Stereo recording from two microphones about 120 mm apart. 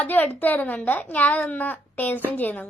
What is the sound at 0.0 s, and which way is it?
A child's voice, 15° left (ahead or behind).